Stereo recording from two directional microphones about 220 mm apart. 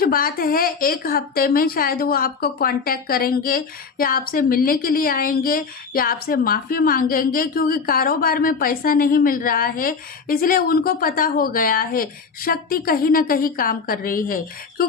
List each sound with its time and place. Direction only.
0.0 s a woman's voice: 40° left (ahead or behind)